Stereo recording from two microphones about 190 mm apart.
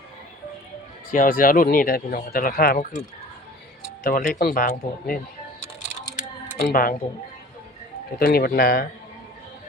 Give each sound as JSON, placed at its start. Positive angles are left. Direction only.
{"t": 1.1, "sound": "speech", "side_deg": 45}
{"t": 4.0, "sound": "speech", "side_deg": 50}
{"t": 6.6, "sound": "speech", "side_deg": 50}
{"t": 8.2, "sound": "speech", "side_deg": 50}